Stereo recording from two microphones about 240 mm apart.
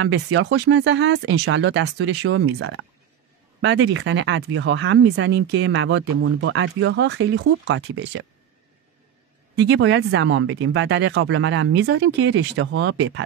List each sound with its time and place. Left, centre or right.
0.0 s speech: right
9.6 s speech: right